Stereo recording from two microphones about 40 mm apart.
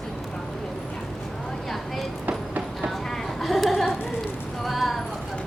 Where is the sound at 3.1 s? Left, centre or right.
Centre.